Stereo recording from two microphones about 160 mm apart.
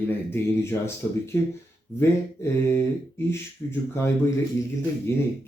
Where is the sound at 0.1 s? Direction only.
15° left (ahead or behind).